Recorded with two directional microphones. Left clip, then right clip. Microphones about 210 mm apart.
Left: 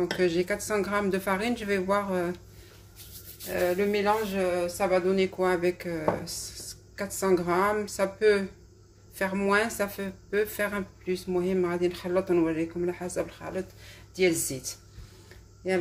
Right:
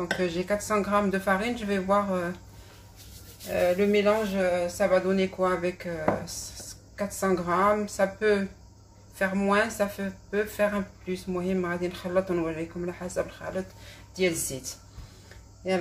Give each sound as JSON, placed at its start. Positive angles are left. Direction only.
{"t": 0.2, "sound": "speech", "side_deg": 30}
{"t": 3.4, "sound": "speech", "side_deg": 20}